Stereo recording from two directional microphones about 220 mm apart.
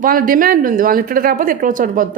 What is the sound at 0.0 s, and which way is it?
Speech, 40° right (ahead or behind).